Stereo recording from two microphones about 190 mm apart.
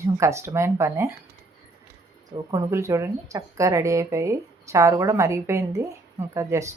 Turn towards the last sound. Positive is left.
turn(degrees=-15)  # may be behind; listen again after turning